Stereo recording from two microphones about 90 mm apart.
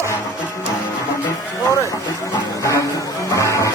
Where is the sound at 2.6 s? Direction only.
35° left (ahead or behind).